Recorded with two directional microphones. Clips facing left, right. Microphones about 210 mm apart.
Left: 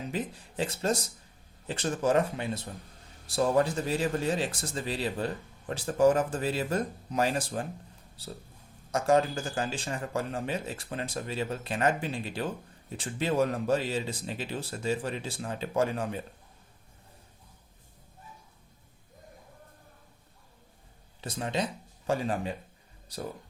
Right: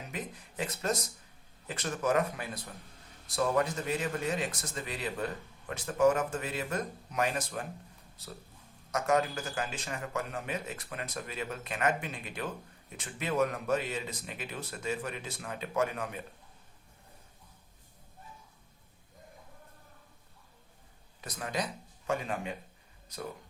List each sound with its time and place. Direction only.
0.1 s speech: 30° left (ahead or behind)
21.2 s speech: 30° left (ahead or behind)